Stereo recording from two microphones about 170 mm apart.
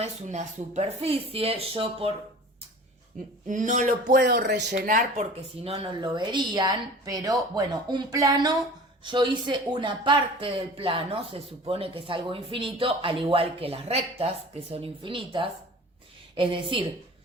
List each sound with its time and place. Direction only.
0.0 s speech: 45° right (ahead or behind)
3.4 s speech: 50° right (ahead or behind)
4.1 s speech: 75° right (ahead or behind)
4.9 s speech: 45° right (ahead or behind); by 16.8 s 30° right (ahead or behind)